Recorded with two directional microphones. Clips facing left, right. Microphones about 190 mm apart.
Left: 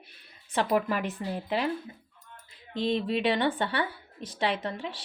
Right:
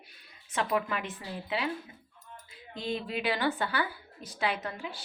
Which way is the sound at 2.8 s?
30° left (ahead or behind).